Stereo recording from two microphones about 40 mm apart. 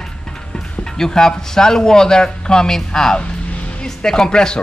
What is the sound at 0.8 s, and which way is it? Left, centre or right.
Speech, centre.